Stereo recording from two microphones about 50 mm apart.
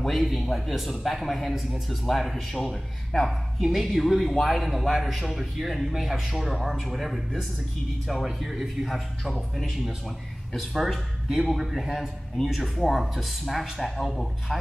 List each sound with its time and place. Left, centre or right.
0.0 s a man's voice: centre
10.7 s a man's voice: centre